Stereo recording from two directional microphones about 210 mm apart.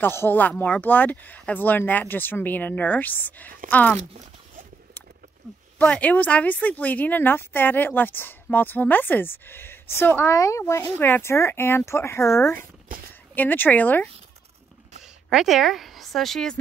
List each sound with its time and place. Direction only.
0.0 s a woman's voice: 10° left (ahead or behind)
5.8 s a woman's voice: 5° left (ahead or behind)
12.5 s speech: 40° right (ahead or behind)
13.3 s a woman's voice: 10° left (ahead or behind)
15.2 s a woman's voice: centre (ahead or behind)